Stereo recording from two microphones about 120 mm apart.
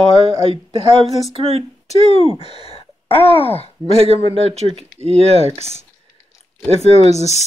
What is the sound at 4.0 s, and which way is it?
Speech, 55° right (ahead or behind).